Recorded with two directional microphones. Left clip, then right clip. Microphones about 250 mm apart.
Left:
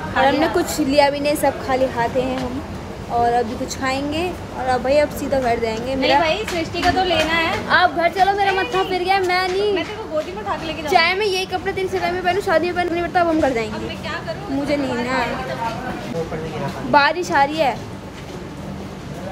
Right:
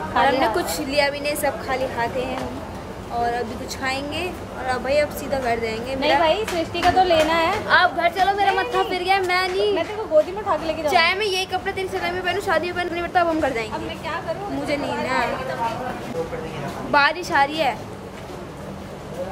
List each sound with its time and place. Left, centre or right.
0.2 s speech: centre
7.2 s a woman's voice: right
7.7 s a woman's voice: centre
10.9 s a woman's voice: centre
14.7 s speech: centre
16.9 s speech: centre